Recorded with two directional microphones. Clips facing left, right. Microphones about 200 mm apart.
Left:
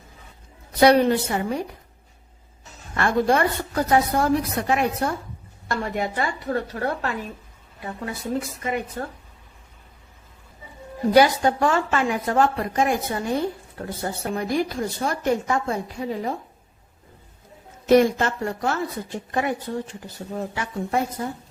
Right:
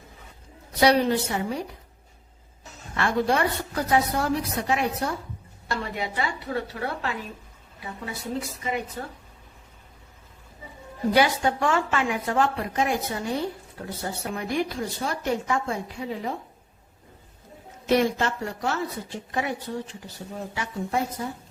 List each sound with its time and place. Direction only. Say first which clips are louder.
0.8 s a woman's voice: left 4 dB; 55° left (ahead or behind)
2.9 s a woman's voice: left 3 dB; 45° left (ahead or behind)
11.1 s a woman's voice: left 5 dB; 40° left (ahead or behind)
17.8 s a woman's voice: left 5 dB; 45° left (ahead or behind)